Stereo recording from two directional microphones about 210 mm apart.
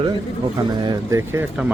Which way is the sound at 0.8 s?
15° right (ahead or behind).